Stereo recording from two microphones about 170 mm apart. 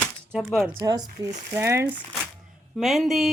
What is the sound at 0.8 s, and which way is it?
Speech, 20° right (ahead or behind).